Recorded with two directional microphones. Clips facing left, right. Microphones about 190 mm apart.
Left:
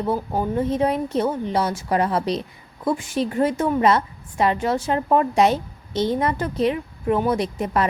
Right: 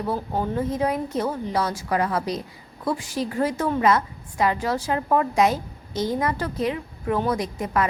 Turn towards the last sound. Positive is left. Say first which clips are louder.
# left 3 dB
turn(degrees=25)  # may be behind; listen again after turning